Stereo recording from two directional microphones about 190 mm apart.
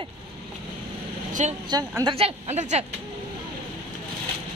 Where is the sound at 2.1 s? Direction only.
35° right (ahead or behind).